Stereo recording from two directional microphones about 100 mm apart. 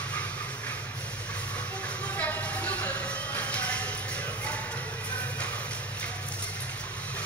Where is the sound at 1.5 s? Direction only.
15° left (ahead or behind).